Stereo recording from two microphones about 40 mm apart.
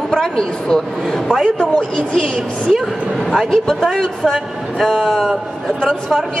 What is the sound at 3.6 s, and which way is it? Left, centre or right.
A man's voice, centre.